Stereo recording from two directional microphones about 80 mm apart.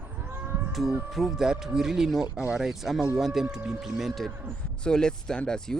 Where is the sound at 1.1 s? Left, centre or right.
Centre.